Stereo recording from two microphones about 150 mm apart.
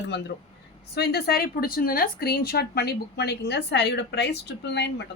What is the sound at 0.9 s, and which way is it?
Speech, 90° left.